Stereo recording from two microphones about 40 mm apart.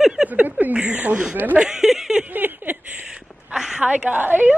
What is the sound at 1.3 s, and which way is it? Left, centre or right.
Speech, right.